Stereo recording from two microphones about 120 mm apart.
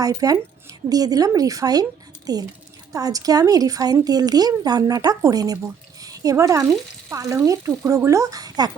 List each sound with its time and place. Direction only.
0.0 s speech: 30° right (ahead or behind)